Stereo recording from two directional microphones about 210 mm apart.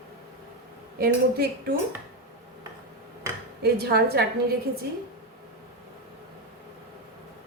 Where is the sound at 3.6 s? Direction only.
50° right (ahead or behind).